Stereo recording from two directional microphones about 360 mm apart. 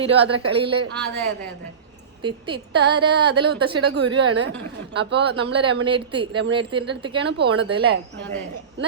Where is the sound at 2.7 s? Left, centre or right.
Right.